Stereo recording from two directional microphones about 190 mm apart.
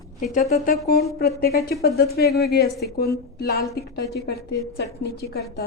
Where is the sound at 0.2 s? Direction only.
40° left (ahead or behind).